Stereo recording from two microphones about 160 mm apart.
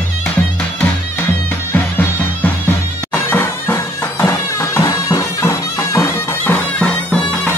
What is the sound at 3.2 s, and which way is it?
Music, 15° left (ahead or behind).